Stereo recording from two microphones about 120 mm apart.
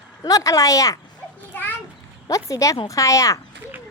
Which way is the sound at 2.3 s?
25° left (ahead or behind).